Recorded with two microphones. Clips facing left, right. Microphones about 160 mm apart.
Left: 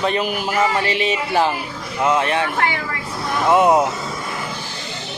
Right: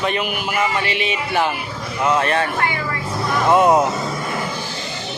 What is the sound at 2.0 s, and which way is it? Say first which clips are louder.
Speech: even; 15° left (ahead or behind).